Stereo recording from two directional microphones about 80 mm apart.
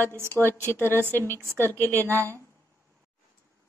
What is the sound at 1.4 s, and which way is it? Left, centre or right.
Speech, right.